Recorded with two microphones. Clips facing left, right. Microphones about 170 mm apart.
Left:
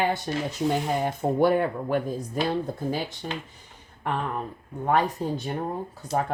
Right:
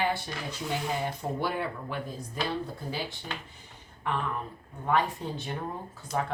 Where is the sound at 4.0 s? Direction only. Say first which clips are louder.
Left 3 dB; 50° left (ahead or behind).